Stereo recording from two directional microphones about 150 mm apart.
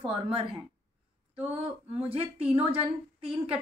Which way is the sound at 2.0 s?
40° right (ahead or behind).